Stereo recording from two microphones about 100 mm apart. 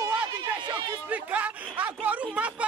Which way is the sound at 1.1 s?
15° right (ahead or behind).